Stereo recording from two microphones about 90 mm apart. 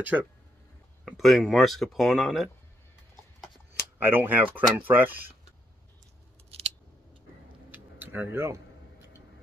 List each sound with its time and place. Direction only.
0.1 s speech: 15° right (ahead or behind)
1.0 s speech: centre (ahead or behind)
4.0 s speech: 25° right (ahead or behind)
7.7 s a sound: 20° right (ahead or behind)